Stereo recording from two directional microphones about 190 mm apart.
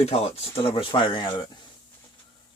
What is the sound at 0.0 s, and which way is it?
Speech, 35° left (ahead or behind).